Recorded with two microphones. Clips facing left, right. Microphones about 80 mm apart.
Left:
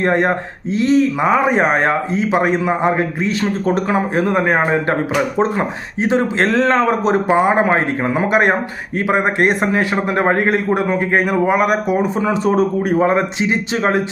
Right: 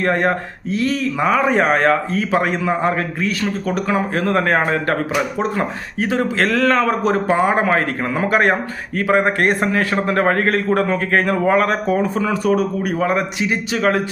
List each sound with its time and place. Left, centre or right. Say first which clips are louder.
0.0 s a man's voice: left 2 dB; left